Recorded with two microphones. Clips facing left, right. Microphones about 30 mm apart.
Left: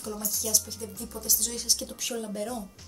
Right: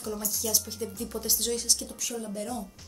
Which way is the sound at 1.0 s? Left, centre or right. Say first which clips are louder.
Even; right.